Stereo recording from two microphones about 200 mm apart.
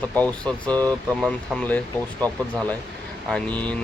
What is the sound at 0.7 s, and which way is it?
Speech, 20° right (ahead or behind).